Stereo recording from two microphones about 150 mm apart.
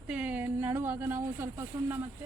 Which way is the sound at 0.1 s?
10° right (ahead or behind).